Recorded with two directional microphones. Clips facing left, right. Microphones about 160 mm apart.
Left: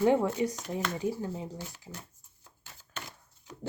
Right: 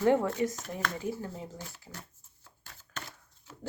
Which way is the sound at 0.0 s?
10° left (ahead or behind).